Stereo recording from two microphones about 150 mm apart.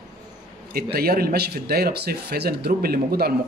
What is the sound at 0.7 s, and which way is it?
A man's voice, 90° right.